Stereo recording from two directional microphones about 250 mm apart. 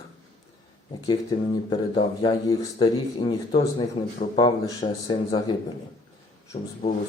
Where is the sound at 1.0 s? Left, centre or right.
Centre.